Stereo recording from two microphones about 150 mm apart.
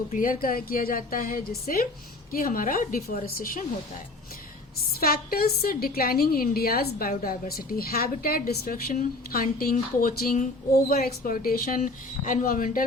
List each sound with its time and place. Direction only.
0.1 s speech: 65° left (ahead or behind)
0.4 s a woman's voice: 75° left (ahead or behind)
4.9 s a woman's voice: 80° left; by 12.8 s 65° left (ahead or behind)